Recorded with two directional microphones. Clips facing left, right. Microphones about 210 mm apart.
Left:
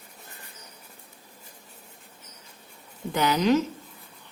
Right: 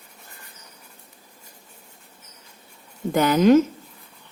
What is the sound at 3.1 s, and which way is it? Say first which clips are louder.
Speech: right 7 dB; 50° right (ahead or behind).